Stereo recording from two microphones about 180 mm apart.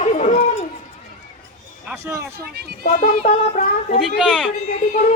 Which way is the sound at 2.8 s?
50° left (ahead or behind).